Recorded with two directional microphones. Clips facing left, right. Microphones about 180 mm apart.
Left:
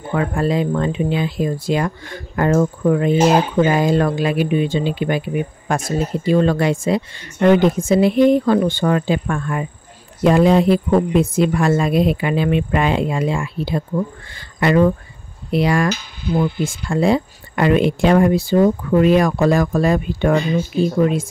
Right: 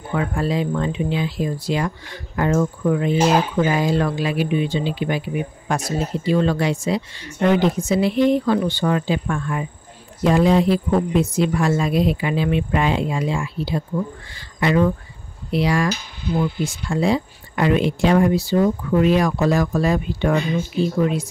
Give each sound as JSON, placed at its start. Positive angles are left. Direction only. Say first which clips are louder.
{"t": 0.1, "sound": "speech", "louder": "left 3 dB", "side_deg": 55}